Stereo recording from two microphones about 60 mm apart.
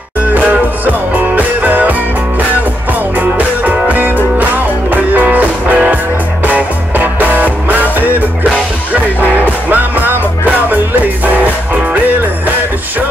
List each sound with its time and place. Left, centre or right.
0.3 s music: right
3.2 s music: right
9.7 s music: right